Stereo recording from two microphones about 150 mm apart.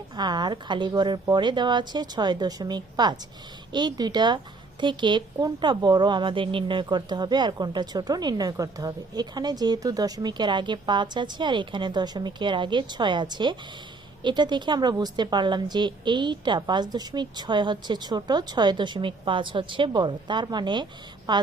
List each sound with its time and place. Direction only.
0.2 s a woman's voice: 30° right (ahead or behind)